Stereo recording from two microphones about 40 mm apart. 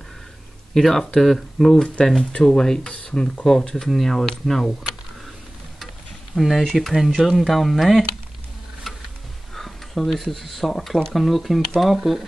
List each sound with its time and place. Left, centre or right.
0.7 s speech: centre
2.9 s speech: left
3.4 s speech: centre
6.3 s speech: centre
6.6 s speech: centre
8.9 s a sound: centre
9.5 s speech: centre